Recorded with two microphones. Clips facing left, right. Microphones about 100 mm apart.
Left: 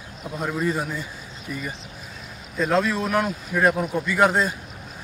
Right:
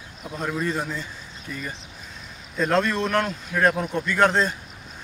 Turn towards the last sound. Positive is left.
turn(degrees=5)  # may be behind; listen again after turning